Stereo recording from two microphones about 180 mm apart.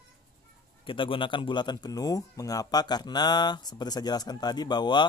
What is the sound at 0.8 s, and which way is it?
Speech, 30° left (ahead or behind).